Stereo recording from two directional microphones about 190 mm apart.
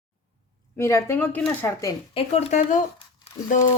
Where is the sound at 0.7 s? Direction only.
15° left (ahead or behind).